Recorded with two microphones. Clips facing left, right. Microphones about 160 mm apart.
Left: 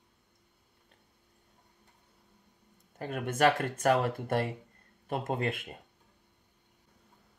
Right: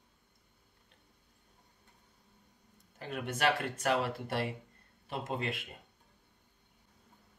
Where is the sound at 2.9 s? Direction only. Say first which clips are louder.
Left 6 dB; 50° left (ahead or behind).